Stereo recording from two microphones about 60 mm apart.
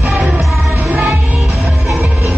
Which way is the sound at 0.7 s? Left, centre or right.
Right.